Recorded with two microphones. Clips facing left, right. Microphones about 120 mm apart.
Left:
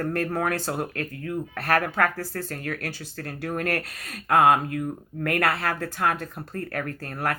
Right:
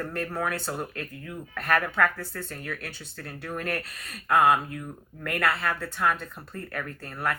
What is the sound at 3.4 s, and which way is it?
Speech, 55° left (ahead or behind).